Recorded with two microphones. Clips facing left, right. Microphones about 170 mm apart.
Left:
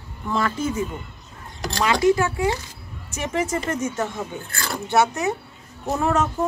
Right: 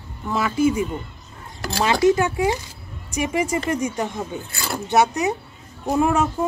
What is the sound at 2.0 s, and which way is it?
Speech, 20° right (ahead or behind).